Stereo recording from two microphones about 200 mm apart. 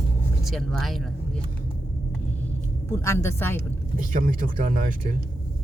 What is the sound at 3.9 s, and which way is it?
Speech, 40° right (ahead or behind).